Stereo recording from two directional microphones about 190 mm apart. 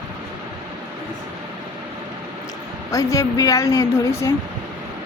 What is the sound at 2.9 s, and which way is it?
Speech, 15° left (ahead or behind).